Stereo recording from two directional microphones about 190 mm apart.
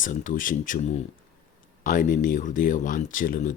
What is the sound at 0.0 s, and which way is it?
Speech, 45° left (ahead or behind).